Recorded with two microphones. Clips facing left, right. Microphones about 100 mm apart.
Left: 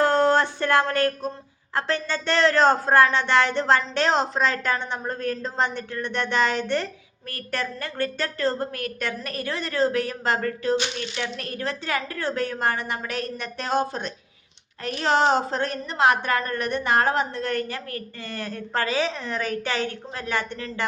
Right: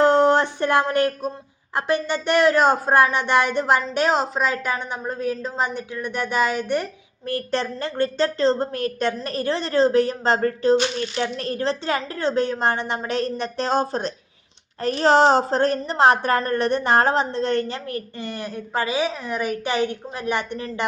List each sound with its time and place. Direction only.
0.0 s a sound: 20° right (ahead or behind)
1.7 s speech: 15° right (ahead or behind)
7.3 s a woman's voice: 30° right (ahead or behind)